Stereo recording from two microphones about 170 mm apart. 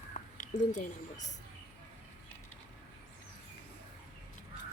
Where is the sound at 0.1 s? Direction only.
45° left (ahead or behind).